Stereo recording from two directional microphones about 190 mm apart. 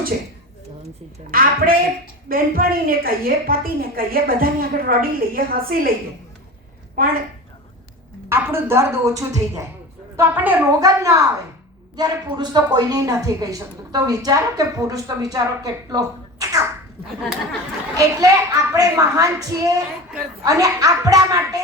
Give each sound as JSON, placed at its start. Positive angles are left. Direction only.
{"t": 1.3, "sound": "a woman's voice", "side_deg": -50}
{"t": 6.9, "sound": "a woman's voice", "side_deg": -50}
{"t": 8.3, "sound": "a woman's voice", "side_deg": -10}
{"t": 17.9, "sound": "a woman's voice", "side_deg": -20}